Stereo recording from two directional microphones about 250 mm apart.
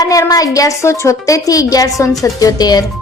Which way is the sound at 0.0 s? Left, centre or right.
Centre.